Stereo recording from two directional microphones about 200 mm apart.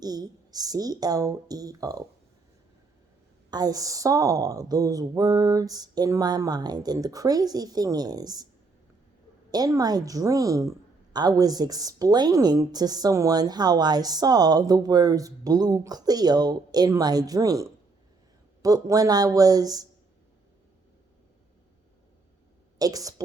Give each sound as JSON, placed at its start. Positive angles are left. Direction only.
{"t": 0.0, "sound": "a woman's voice", "side_deg": -20}
{"t": 3.5, "sound": "a woman's voice", "side_deg": -20}
{"t": 9.5, "sound": "a woman's voice", "side_deg": -20}
{"t": 22.8, "sound": "a woman's voice", "side_deg": -20}